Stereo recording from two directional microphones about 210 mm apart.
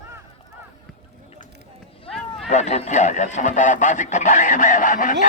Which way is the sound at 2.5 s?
35° left (ahead or behind).